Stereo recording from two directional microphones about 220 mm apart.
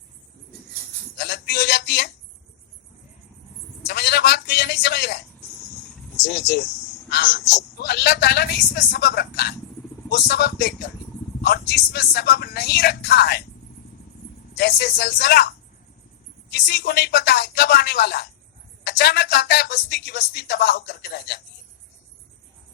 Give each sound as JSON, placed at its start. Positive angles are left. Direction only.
{"t": 1.1, "sound": "a sound", "side_deg": 45}
{"t": 3.8, "sound": "a man's voice", "side_deg": 50}
{"t": 6.2, "sound": "speech", "side_deg": 50}
{"t": 14.5, "sound": "speech", "side_deg": 45}